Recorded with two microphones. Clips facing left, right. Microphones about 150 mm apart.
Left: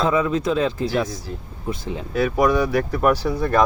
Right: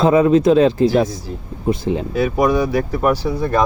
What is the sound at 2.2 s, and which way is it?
Speech, 10° right (ahead or behind).